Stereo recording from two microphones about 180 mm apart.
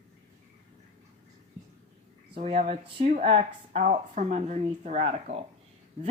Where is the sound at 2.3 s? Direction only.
35° right (ahead or behind).